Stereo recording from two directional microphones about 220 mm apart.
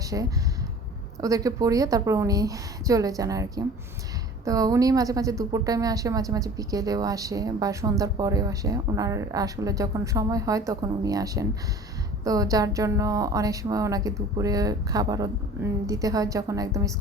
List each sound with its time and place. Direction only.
0.1 s a woman's voice: 15° right (ahead or behind)